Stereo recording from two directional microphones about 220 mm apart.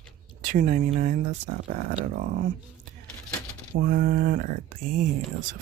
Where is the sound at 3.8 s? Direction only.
40° right (ahead or behind).